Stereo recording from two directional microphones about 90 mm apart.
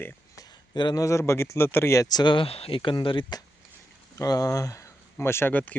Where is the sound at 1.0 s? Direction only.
35° left (ahead or behind).